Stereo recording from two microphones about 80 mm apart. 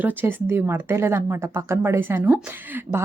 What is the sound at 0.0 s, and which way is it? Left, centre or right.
A woman's voice, right.